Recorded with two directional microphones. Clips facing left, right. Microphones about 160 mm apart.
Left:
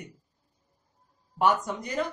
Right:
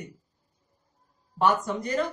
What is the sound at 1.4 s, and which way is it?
Speech, 15° left (ahead or behind).